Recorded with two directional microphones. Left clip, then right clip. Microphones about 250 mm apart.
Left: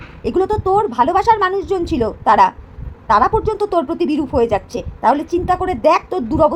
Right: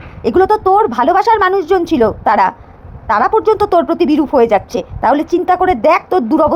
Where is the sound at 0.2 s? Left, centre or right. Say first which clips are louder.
Right 6 dB; centre.